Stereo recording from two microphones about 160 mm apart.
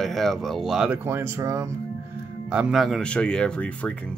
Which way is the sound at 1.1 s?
15° right (ahead or behind).